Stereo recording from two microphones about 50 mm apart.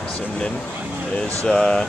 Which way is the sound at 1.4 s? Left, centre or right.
Left.